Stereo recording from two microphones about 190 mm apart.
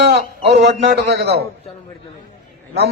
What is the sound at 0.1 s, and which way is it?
A man's voice, 60° right (ahead or behind).